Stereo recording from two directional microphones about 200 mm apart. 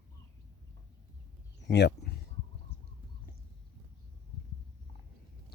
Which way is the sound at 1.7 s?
55° left (ahead or behind).